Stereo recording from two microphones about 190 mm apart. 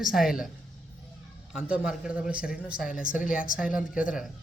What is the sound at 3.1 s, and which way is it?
Speech, 45° left (ahead or behind).